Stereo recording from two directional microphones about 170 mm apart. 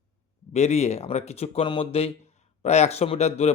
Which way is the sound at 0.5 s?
40° left (ahead or behind).